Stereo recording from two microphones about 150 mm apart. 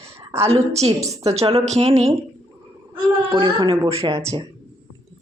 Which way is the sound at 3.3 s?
35° right (ahead or behind).